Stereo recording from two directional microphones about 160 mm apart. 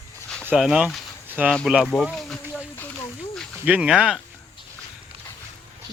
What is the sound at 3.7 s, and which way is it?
Speech, 5° right (ahead or behind).